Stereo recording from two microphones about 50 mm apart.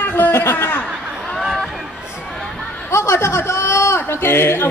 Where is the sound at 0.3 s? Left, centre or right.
Left.